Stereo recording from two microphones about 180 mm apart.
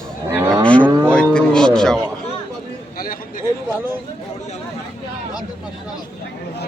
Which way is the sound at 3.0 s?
50° left (ahead or behind).